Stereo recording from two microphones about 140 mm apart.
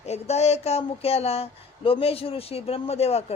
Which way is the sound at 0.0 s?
50° left (ahead or behind).